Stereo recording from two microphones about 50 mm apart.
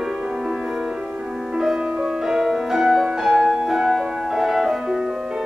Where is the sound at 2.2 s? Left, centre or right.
Centre.